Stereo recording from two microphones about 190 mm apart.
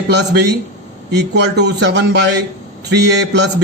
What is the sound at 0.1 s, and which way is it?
A man's voice, 60° right (ahead or behind).